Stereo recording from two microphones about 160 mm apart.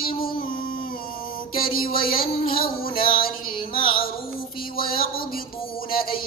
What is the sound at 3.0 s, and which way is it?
Music, 65° left (ahead or behind).